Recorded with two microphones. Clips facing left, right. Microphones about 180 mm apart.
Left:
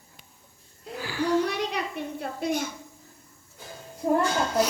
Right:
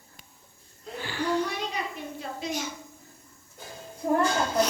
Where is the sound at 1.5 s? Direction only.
70° left (ahead or behind).